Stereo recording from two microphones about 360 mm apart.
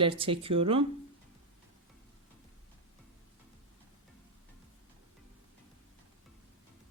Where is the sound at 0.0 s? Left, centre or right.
Centre.